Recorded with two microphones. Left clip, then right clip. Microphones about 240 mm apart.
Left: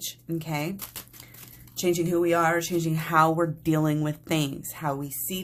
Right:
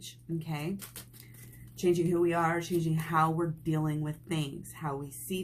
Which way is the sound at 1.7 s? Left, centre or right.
Left.